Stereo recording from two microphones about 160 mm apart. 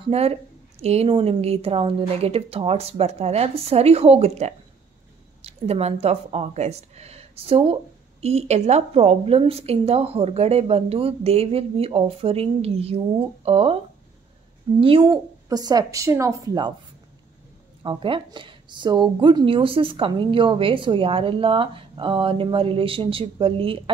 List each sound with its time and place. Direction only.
0.0 s a woman's voice: 40° right (ahead or behind)
14.8 s a woman's voice: 35° right (ahead or behind)
17.8 s a woman's voice: 30° right (ahead or behind)